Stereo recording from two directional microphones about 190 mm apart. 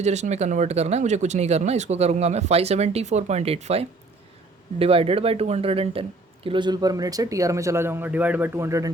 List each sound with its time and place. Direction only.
0.0 s speech: 35° right (ahead or behind); by 8.9 s 15° right (ahead or behind)